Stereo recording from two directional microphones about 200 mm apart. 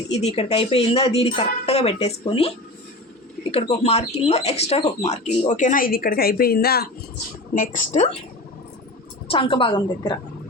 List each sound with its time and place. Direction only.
0.1 s speech: 30° left (ahead or behind)
3.5 s speech: 30° left (ahead or behind); by 6.8 s 50° left (ahead or behind)
7.5 s speech: 40° left (ahead or behind)
9.3 s speech: 25° left (ahead or behind)